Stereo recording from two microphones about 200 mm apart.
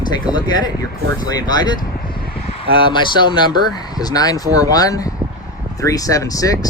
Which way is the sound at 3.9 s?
20° left (ahead or behind).